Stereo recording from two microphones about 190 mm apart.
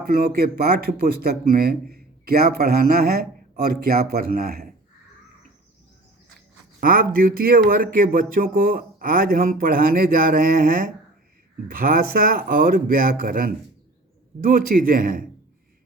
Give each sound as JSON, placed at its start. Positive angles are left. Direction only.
{"t": 0.0, "sound": "speech", "side_deg": -50}
{"t": 6.7, "sound": "speech", "side_deg": -50}